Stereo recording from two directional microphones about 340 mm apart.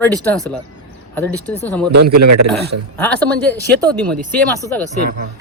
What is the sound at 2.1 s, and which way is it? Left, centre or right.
Speech, right.